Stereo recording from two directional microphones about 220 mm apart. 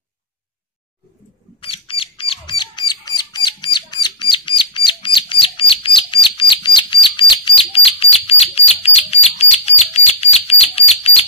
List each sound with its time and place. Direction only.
1.6 s mouse: 25° left (ahead or behind)